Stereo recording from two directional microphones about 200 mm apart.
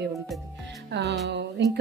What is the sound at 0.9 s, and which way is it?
Speech, 60° right (ahead or behind).